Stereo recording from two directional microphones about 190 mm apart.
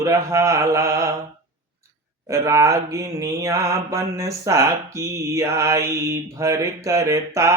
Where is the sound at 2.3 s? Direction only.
15° right (ahead or behind).